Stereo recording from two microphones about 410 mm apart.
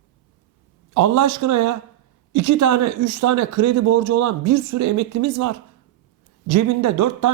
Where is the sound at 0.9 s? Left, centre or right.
Right.